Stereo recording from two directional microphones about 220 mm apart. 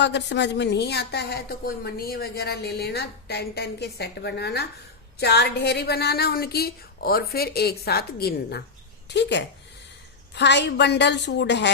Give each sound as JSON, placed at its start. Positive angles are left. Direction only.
{"t": 0.0, "sound": "speech", "side_deg": 50}